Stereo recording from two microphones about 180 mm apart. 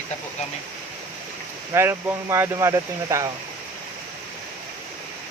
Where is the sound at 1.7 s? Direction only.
15° right (ahead or behind).